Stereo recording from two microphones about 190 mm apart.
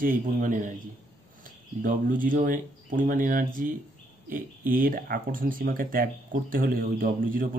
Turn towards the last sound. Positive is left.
turn(degrees=-50)  # may be behind; listen again after turning